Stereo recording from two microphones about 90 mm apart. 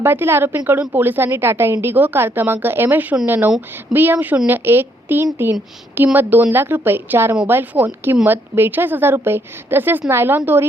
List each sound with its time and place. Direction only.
0.0 s a woman's voice: 25° right (ahead or behind)